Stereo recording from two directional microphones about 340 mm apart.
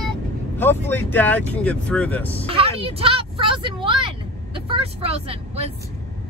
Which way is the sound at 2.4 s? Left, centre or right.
Centre.